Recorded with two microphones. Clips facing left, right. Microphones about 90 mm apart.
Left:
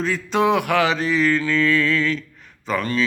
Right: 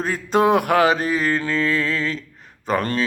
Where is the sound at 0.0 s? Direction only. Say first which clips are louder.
Right 1 dB; 45° right (ahead or behind).